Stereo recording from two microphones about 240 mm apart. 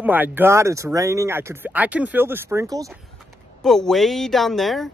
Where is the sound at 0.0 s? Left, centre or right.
Centre.